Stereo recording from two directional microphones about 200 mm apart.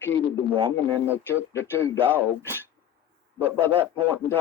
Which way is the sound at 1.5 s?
10° left (ahead or behind).